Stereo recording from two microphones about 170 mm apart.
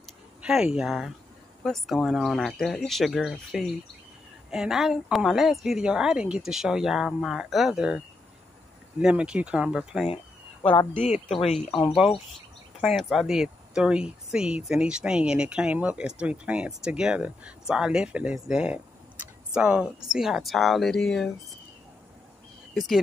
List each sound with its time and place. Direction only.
0.4 s speech: 5° right (ahead or behind)
9.0 s speech: 5° right (ahead or behind)
10.0 s a sound: 35° left (ahead or behind)
11.1 s speech: 35° left (ahead or behind)
11.9 s speech: centre (ahead or behind)